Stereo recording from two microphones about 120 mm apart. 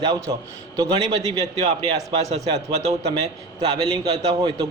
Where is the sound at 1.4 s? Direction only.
60° right (ahead or behind).